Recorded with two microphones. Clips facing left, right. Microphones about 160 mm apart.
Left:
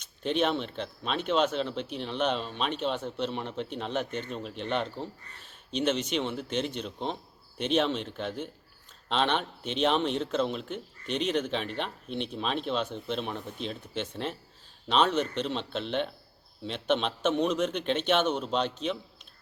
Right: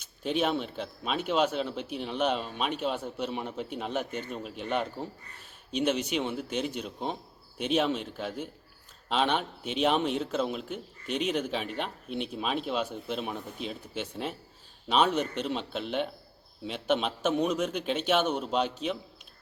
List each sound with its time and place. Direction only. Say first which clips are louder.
0.0 s a man's voice: left 1 dB; 5° right (ahead or behind)